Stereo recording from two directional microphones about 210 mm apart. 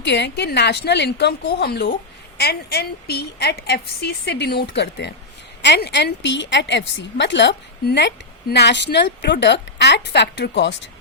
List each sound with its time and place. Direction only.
0.0 s a woman's voice: 55° left (ahead or behind)